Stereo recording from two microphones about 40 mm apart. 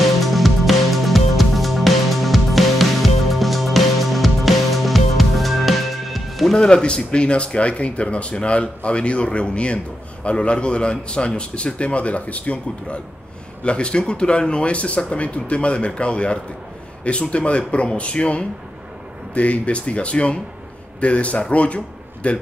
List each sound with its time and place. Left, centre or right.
0.2 s music: centre
6.5 s speech: left